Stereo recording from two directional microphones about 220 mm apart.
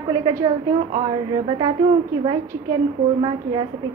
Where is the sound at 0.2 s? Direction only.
15° right (ahead or behind).